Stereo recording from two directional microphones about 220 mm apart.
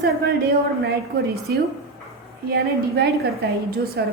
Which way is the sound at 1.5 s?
45° right (ahead or behind).